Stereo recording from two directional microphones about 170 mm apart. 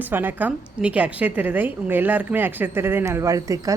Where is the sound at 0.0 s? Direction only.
10° right (ahead or behind).